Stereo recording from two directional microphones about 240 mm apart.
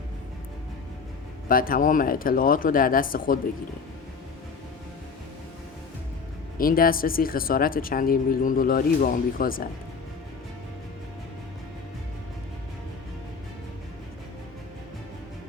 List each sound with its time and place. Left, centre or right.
1.5 s speech: left
6.6 s speech: left